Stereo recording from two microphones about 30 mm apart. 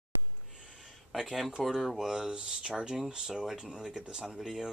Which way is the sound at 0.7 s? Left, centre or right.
Centre.